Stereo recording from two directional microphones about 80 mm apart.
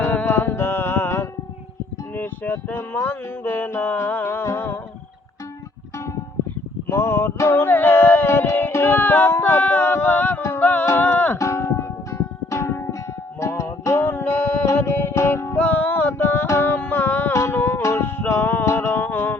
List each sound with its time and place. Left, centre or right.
0.0 s music: left
6.8 s a sound: left
10.8 s music: left
11.3 s music: left
14.0 s music: left
15.5 s music: left